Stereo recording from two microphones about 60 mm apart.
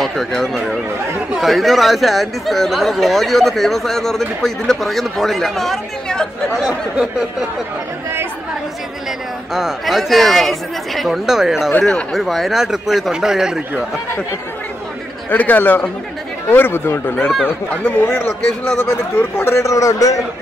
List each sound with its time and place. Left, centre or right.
0.0 s speech: centre
6.6 s a sound: centre
9.5 s speech: centre
15.2 s speech: left
18.4 s speech: centre
18.8 s speech: left
19.6 s a man's voice: left